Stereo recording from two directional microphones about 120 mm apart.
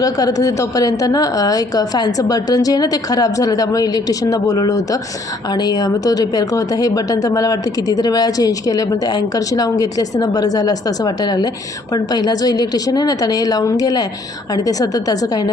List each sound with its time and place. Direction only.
0.0 s speech: 30° left (ahead or behind)